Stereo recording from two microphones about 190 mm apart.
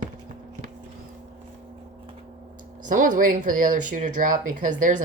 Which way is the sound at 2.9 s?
45° right (ahead or behind).